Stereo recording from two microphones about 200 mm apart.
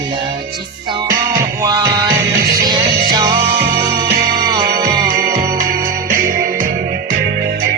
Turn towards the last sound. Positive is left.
turn(degrees=-45)  # may be behind; listen again after turning